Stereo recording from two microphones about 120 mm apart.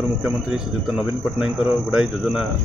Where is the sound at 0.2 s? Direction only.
5° right (ahead or behind).